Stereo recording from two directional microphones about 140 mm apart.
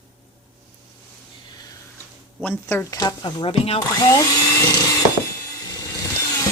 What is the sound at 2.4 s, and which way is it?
Speech, 15° left (ahead or behind).